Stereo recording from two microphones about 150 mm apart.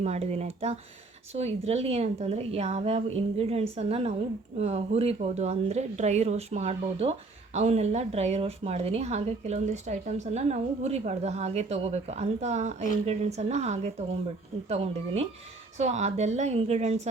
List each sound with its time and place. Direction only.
0.0 s speech: 45° right (ahead or behind)